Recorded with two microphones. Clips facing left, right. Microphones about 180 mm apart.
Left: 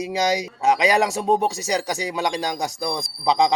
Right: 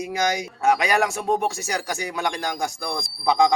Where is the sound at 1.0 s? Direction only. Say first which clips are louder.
Left 3 dB; 20° left (ahead or behind).